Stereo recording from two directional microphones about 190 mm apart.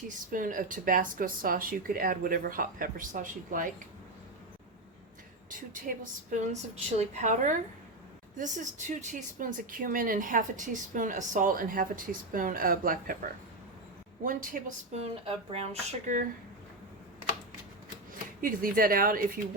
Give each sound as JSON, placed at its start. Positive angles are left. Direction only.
{"t": 0.3, "sound": "a woman's voice", "side_deg": -45}
{"t": 5.5, "sound": "a woman's voice", "side_deg": -45}
{"t": 14.3, "sound": "a woman's voice", "side_deg": -45}
{"t": 15.4, "sound": "a woman's voice", "side_deg": -35}
{"t": 18.4, "sound": "a woman's voice", "side_deg": -45}